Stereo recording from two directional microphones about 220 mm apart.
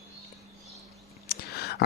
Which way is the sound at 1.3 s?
45° left (ahead or behind).